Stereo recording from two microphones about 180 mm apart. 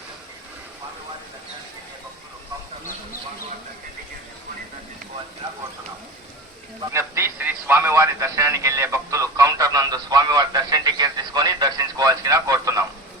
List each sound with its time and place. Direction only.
6.9 s a man's voice: 15° right (ahead or behind)